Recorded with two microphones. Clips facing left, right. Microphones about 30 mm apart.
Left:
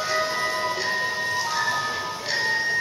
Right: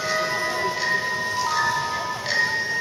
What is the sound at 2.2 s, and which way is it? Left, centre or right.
Ice cream truck, centre.